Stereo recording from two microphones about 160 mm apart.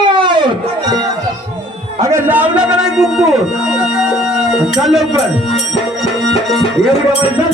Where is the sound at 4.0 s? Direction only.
Centre (ahead or behind).